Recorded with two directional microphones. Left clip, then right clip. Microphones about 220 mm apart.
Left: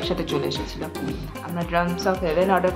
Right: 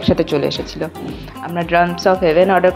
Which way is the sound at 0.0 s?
30° right (ahead or behind).